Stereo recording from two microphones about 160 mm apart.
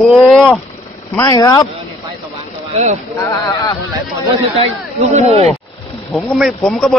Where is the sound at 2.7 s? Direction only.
50° right (ahead or behind).